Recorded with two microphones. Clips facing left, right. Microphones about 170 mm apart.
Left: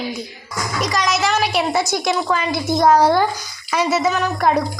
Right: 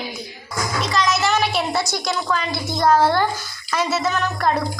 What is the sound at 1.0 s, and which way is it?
A woman's voice, 10° left (ahead or behind).